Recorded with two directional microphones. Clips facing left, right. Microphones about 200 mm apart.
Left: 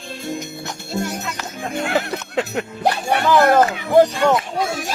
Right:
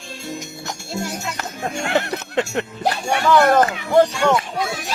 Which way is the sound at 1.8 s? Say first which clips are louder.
Even; centre (ahead or behind).